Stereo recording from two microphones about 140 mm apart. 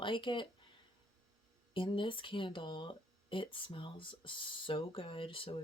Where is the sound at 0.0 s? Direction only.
35° left (ahead or behind).